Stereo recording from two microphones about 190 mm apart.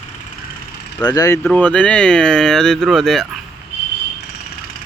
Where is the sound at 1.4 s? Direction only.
5° left (ahead or behind).